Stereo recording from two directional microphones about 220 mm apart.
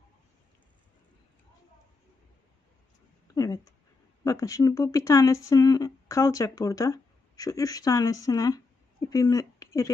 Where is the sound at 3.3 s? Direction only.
15° left (ahead or behind).